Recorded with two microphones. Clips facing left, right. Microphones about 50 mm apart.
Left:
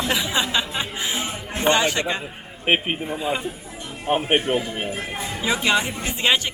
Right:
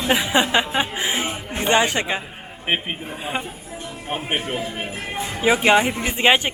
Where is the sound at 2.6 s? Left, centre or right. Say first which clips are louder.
Left 3 dB; left.